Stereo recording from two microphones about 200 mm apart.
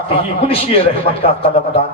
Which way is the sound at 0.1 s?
30° left (ahead or behind).